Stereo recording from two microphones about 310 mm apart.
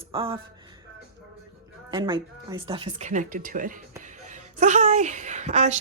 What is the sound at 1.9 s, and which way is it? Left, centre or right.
A woman's voice, centre.